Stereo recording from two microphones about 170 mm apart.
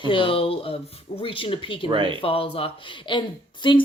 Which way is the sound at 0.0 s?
30° left (ahead or behind).